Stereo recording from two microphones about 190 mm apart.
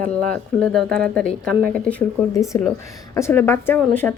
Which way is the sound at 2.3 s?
15° left (ahead or behind).